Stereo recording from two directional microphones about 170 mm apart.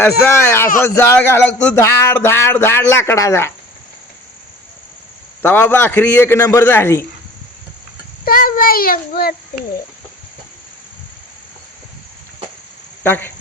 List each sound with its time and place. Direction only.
0.3 s speech: 15° left (ahead or behind)
5.4 s speech: 10° left (ahead or behind)
8.2 s a child's voice: 55° left (ahead or behind)
13.0 s speech: 10° left (ahead or behind)